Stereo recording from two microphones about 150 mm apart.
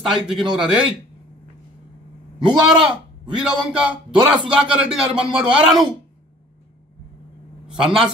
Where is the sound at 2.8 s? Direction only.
5° right (ahead or behind).